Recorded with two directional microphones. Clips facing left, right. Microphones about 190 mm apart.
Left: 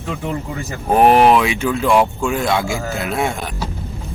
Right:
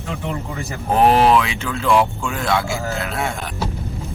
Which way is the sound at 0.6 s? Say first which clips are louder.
Left 3 dB; 15° left (ahead or behind).